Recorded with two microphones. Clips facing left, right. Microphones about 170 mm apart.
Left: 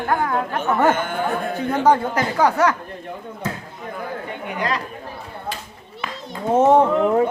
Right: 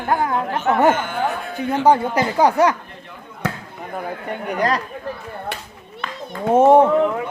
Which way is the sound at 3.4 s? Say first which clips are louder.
Right 3 dB; 70° right (ahead or behind).